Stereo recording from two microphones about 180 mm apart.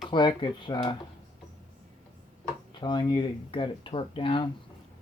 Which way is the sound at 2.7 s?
25° left (ahead or behind).